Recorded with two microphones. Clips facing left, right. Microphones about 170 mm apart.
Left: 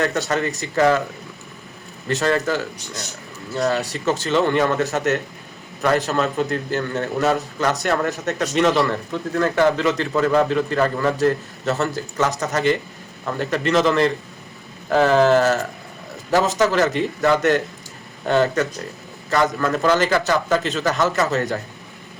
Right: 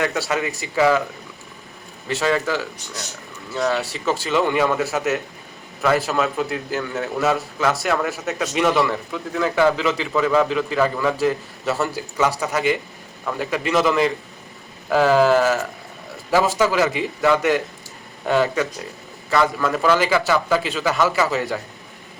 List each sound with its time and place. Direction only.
0.1 s a man's voice: 10° right (ahead or behind)
2.0 s a man's voice: 5° right (ahead or behind)
3.9 s a man's voice: 5° right (ahead or behind)